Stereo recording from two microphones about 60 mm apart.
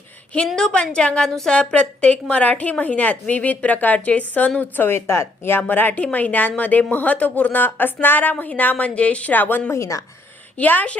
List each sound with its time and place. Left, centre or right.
0.4 s a woman's voice: centre; by 4.9 s left
4.9 s a woman's voice: left
9.7 s speech: left
10.6 s a woman's voice: left